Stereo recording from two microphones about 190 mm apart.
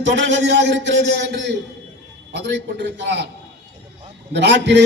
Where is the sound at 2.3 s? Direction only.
65° right (ahead or behind).